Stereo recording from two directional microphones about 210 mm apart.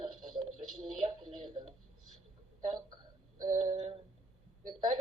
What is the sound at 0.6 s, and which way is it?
A woman's voice, 25° right (ahead or behind).